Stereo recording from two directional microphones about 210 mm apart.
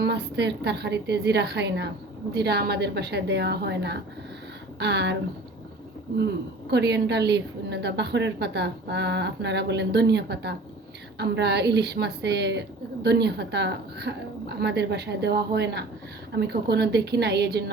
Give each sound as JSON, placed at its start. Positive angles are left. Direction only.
{"t": 0.0, "sound": "a woman's voice", "side_deg": -55}
{"t": 6.7, "sound": "a woman's voice", "side_deg": -55}